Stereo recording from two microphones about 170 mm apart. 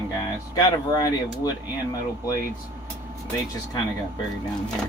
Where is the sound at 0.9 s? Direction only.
25° left (ahead or behind).